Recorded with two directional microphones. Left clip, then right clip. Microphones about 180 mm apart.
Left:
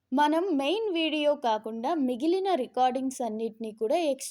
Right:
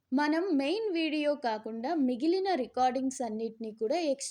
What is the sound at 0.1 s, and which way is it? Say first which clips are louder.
A woman's voice: left 4 dB; 30° left (ahead or behind).